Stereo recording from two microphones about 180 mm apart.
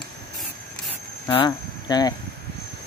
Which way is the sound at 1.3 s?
25° left (ahead or behind).